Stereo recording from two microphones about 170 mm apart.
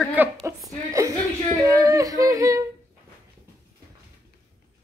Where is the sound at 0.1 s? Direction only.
15° right (ahead or behind).